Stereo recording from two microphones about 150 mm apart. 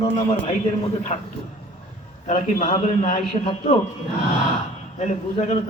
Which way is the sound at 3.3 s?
45° left (ahead or behind).